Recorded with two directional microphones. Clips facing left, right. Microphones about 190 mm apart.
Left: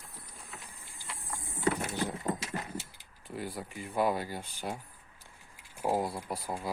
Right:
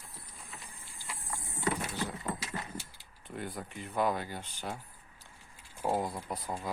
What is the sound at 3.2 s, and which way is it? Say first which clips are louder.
Speech: left 1 dB; 5° left (ahead or behind).